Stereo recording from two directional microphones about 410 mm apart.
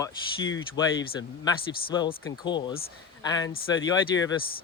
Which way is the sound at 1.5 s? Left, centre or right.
Centre.